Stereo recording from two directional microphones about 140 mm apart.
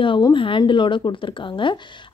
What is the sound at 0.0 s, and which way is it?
A woman's voice, 35° left (ahead or behind).